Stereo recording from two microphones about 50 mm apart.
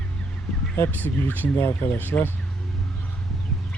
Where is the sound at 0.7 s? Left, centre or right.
Left.